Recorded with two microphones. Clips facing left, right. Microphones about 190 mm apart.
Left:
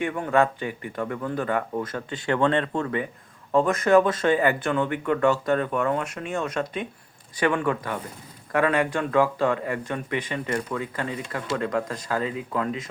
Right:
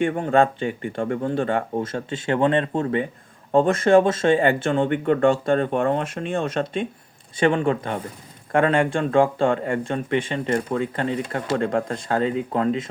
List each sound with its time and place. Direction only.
0.2 s speech: 30° right (ahead or behind)